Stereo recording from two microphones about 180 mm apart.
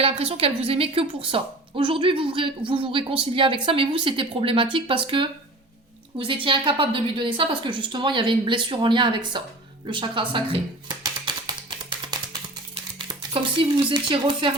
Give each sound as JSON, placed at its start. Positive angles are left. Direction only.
{"t": 0.0, "sound": "a woman's voice", "side_deg": -35}
{"t": 9.8, "sound": "a sound", "side_deg": -25}
{"t": 13.1, "sound": "speech", "side_deg": -30}